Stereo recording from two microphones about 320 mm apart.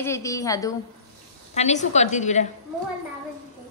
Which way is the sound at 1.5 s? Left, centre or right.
Left.